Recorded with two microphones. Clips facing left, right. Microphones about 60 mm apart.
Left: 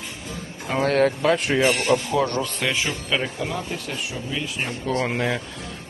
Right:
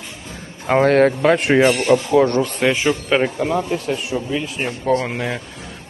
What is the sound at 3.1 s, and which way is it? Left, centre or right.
Speech, right.